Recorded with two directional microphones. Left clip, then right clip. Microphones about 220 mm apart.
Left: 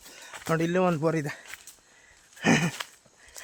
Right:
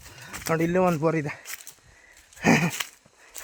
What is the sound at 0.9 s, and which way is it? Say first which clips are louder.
Speech: right 2 dB; 20° right (ahead or behind).